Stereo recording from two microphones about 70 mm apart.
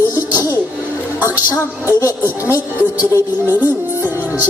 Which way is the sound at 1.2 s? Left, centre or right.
Right.